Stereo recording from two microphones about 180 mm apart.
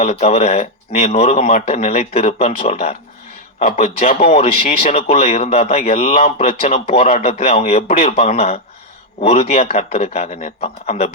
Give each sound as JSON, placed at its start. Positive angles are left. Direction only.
{"t": 0.0, "sound": "a man's voice", "side_deg": 35}